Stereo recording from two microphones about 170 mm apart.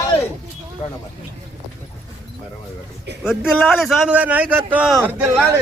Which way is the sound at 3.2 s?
5° right (ahead or behind).